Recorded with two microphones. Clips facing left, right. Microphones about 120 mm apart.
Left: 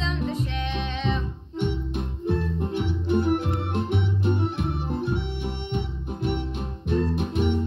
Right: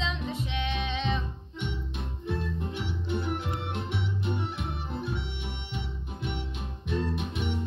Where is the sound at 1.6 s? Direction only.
55° left (ahead or behind).